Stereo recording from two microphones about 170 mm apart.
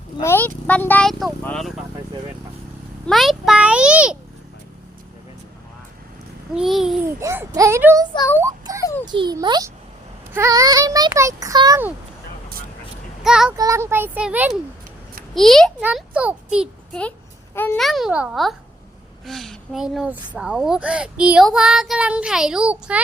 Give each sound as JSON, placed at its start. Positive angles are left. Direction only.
{"t": 0.2, "sound": "speech", "side_deg": 15}
{"t": 3.1, "sound": "speech", "side_deg": 0}
{"t": 6.5, "sound": "speech", "side_deg": 0}
{"t": 7.2, "sound": "speech", "side_deg": -15}
{"t": 8.4, "sound": "a sound", "side_deg": -15}
{"t": 8.8, "sound": "a sound", "side_deg": 15}
{"t": 9.0, "sound": "a child's voice", "side_deg": -25}
{"t": 13.2, "sound": "speech", "side_deg": -5}
{"t": 13.6, "sound": "a child's voice", "side_deg": -15}
{"t": 16.9, "sound": "a sound", "side_deg": 10}
{"t": 17.7, "sound": "speech", "side_deg": 0}